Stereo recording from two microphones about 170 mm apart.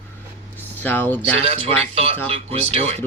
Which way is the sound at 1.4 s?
35° right (ahead or behind).